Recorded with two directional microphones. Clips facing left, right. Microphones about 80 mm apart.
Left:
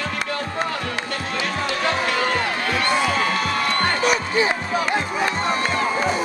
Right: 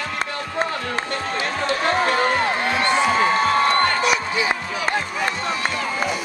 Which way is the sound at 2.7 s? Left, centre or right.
Right.